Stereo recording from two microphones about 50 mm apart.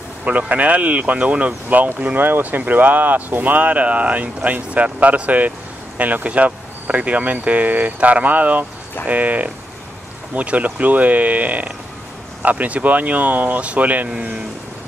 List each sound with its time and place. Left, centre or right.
0.2 s speech: right
14.0 s speech: centre